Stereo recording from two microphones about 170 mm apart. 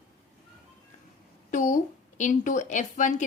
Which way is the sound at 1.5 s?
45° left (ahead or behind).